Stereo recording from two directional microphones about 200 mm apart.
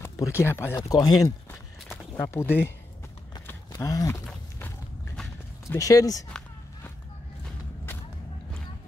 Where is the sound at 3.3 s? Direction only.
20° left (ahead or behind).